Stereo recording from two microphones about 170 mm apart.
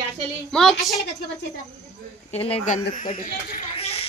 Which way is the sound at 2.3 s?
35° left (ahead or behind).